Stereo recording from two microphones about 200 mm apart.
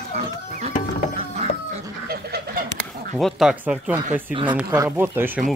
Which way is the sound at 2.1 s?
50° right (ahead or behind).